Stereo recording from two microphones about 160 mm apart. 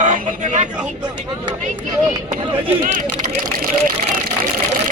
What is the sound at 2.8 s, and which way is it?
Speech, 55° right (ahead or behind).